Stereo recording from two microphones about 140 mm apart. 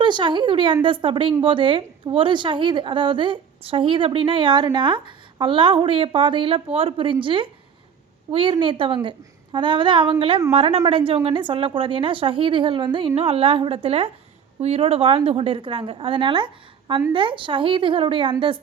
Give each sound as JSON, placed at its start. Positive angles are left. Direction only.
{"t": 0.0, "sound": "a woman's voice", "side_deg": -35}